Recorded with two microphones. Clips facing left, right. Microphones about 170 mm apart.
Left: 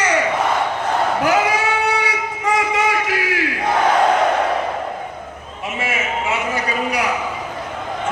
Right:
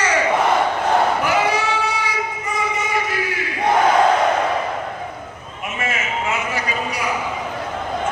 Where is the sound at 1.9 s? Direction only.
80° left.